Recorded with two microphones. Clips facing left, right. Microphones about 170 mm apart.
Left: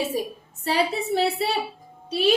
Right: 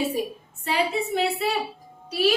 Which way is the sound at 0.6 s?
35° left (ahead or behind).